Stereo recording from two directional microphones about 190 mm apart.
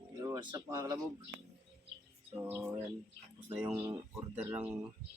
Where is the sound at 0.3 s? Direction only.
20° right (ahead or behind).